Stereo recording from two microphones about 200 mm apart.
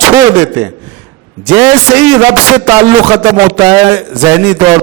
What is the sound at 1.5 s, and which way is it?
A man's voice, 10° right (ahead or behind).